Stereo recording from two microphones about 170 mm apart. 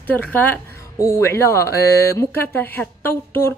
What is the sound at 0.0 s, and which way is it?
Speech, 10° left (ahead or behind).